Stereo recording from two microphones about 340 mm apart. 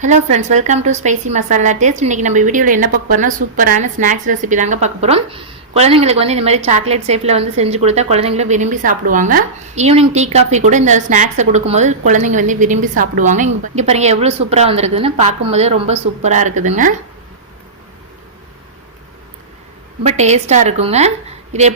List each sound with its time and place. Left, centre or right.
0.0 s a woman's voice: right
20.1 s a woman's voice: centre